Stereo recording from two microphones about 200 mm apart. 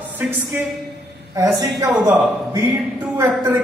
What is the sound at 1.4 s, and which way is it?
Speech, 20° right (ahead or behind).